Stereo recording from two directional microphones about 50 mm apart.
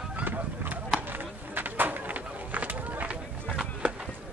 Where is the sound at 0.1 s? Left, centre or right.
Right.